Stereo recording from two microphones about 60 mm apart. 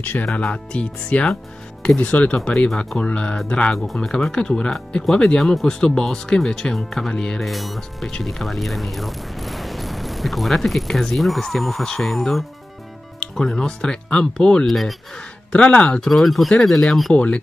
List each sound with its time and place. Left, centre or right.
0.0 s speech: left
0.3 s speech: centre
2.0 s speech: left
3.7 s speech: centre
7.4 s speech: centre
14.7 s speech: centre
15.5 s speech: left
16.1 s speech: centre
17.1 s speech: left